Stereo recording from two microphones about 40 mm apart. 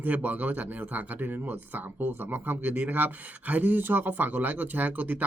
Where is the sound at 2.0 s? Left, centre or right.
Right.